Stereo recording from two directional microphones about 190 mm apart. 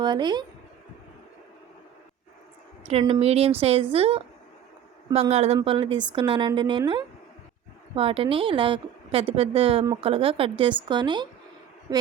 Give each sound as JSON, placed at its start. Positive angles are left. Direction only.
{"t": 0.0, "sound": "a woman's voice", "side_deg": -25}
{"t": 2.8, "sound": "speech", "side_deg": -30}
{"t": 5.3, "sound": "a woman's voice", "side_deg": -35}